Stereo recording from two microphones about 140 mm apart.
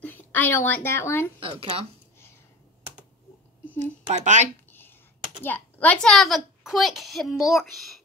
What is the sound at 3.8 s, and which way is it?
Speech, 55° right (ahead or behind).